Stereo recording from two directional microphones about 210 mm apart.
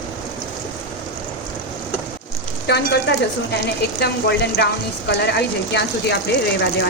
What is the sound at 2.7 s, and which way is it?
Speech, 50° left (ahead or behind).